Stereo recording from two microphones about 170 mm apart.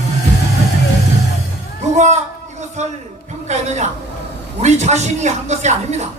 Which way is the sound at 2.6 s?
45° right (ahead or behind).